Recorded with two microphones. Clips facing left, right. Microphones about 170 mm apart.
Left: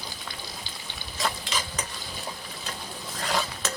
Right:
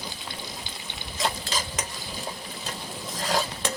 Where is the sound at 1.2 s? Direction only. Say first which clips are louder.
Right 1 dB; 35° right (ahead or behind).